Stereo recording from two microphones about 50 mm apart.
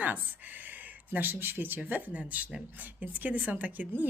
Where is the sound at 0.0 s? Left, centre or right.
Right.